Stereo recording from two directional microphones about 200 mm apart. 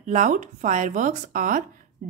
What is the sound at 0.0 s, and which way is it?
Speech, 40° right (ahead or behind).